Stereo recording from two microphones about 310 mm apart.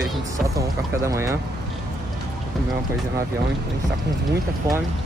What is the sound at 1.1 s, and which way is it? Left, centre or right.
Speech, centre.